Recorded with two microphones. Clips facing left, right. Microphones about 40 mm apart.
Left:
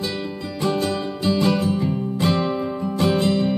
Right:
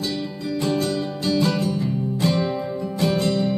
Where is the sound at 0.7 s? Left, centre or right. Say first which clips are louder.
Left 2 dB; left.